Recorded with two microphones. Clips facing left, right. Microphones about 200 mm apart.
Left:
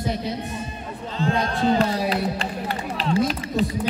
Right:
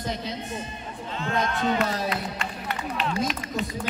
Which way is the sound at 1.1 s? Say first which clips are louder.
Left 4 dB; 35° left (ahead or behind).